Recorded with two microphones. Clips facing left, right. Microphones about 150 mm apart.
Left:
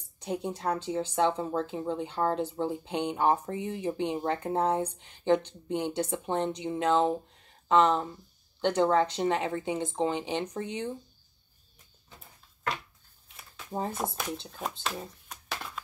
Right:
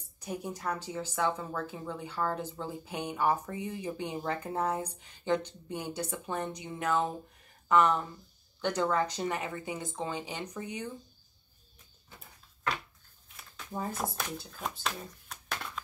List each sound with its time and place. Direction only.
0.2 s speech: 25° left (ahead or behind)
13.9 s speech: centre (ahead or behind)
14.8 s a sound: 5° left (ahead or behind)